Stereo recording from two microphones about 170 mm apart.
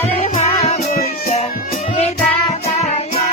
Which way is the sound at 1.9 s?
40° left (ahead or behind).